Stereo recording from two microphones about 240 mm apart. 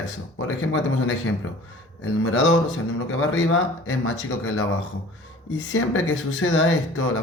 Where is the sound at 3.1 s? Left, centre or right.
Left.